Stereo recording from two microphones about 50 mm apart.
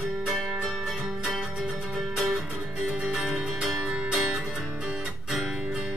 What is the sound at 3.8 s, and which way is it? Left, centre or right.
Music, centre.